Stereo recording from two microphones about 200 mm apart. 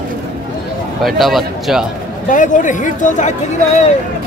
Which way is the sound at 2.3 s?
40° left (ahead or behind).